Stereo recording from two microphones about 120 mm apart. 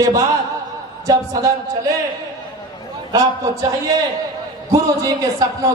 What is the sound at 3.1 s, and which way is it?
Speech, 30° right (ahead or behind).